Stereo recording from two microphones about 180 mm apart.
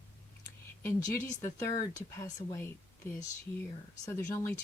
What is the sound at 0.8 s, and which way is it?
Speech, 15° left (ahead or behind).